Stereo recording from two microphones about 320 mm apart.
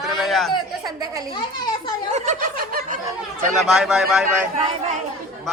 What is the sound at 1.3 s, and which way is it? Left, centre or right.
Speech, centre.